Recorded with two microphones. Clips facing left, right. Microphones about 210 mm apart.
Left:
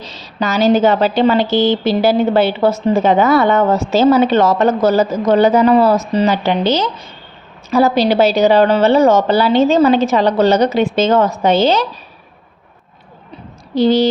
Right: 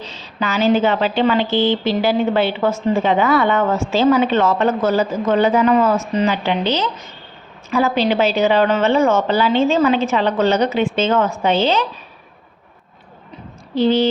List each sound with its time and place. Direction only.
0.0 s a woman's voice: 40° left (ahead or behind)
13.7 s a woman's voice: 40° left (ahead or behind)